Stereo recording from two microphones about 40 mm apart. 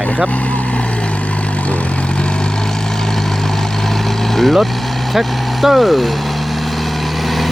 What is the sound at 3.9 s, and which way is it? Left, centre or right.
Vehicle, centre.